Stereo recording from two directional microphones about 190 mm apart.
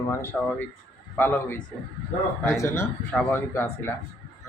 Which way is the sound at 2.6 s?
15° left (ahead or behind).